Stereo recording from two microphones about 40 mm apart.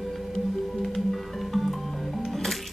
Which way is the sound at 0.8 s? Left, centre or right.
Centre.